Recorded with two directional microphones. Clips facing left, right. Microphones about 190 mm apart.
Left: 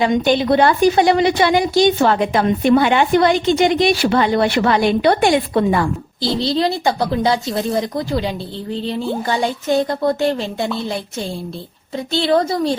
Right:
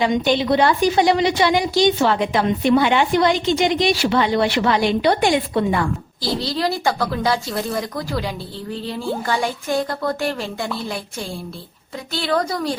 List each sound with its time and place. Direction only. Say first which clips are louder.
0.0 s a woman's voice: left 3 dB; 50° left (ahead or behind)
6.4 s speech: left 4 dB; 25° left (ahead or behind)
12.1 s speech: left 5 dB; 25° left (ahead or behind)